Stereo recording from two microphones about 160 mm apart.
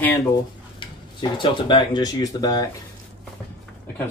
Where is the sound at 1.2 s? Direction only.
30° left (ahead or behind).